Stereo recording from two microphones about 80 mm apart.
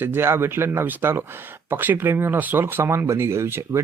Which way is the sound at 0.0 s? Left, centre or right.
Right.